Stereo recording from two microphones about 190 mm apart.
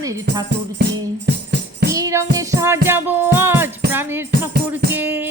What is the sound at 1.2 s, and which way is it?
Music, 65° right (ahead or behind).